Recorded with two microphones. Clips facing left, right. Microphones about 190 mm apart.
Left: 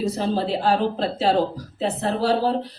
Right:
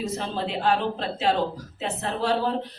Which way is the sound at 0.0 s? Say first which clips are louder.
Left 6 dB; 35° left (ahead or behind).